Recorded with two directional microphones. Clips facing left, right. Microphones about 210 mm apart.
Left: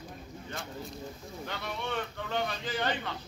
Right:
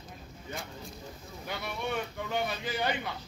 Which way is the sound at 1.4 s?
10° right (ahead or behind).